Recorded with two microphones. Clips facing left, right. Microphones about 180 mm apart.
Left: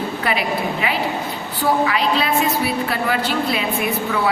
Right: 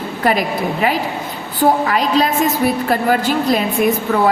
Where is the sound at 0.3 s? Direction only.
40° right (ahead or behind).